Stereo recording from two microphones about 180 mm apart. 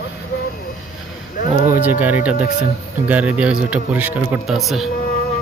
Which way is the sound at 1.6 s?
10° right (ahead or behind).